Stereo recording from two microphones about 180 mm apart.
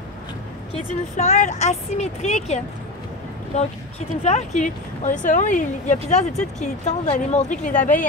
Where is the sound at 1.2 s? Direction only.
40° left (ahead or behind).